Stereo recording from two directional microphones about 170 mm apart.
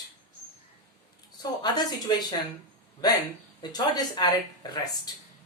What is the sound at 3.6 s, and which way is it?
Speech, 25° left (ahead or behind).